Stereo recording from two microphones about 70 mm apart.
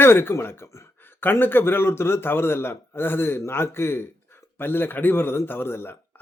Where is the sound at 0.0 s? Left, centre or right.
Left.